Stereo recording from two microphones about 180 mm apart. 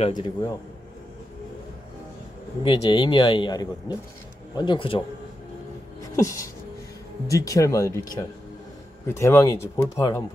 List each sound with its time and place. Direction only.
0.1 s speech: 25° left (ahead or behind)
2.6 s speech: 25° left (ahead or behind)
6.1 s a sound: 20° left (ahead or behind)
7.2 s speech: 20° left (ahead or behind)